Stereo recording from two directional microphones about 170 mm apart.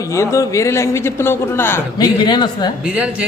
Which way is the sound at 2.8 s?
5° right (ahead or behind).